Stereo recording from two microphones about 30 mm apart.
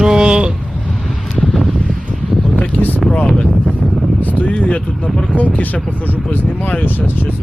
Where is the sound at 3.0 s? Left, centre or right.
Left.